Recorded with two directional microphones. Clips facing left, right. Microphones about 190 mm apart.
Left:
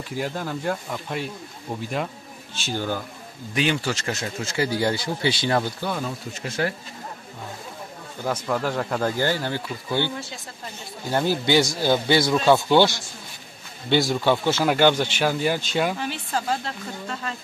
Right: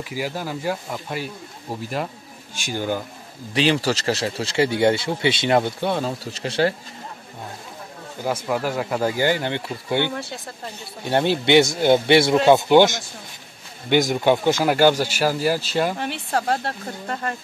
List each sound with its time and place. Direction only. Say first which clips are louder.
0.1 s speech: even; 5° right (ahead or behind)
2.5 s speech: right 2 dB; 15° right (ahead or behind)
3.5 s speech: right 4 dB; 30° right (ahead or behind)
8.2 s speech: right 1 dB; 10° right (ahead or behind)
11.4 s speech: right 7 dB; 25° right (ahead or behind); by 16.0 s centre (ahead or behind)
16.0 s speech: right 3 dB; 60° right (ahead or behind)